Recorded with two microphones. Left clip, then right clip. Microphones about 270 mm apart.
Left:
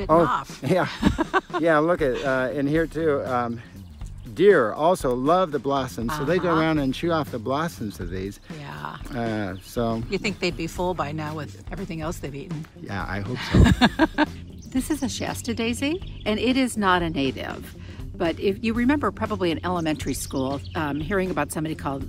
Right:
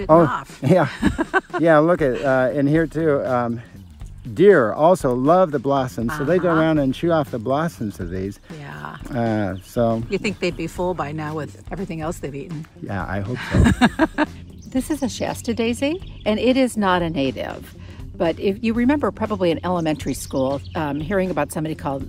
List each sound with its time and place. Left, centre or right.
0.1 s speech: centre
0.8 s speech: centre
1.6 s speech: centre
6.0 s speech: centre
8.5 s a sound: centre
9.1 s speech: centre
10.0 s speech: centre
12.8 s speech: centre
13.3 s speech: centre